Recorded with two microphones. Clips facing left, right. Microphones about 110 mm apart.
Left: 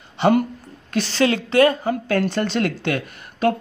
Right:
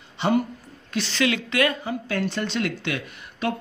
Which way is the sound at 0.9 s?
35° left (ahead or behind).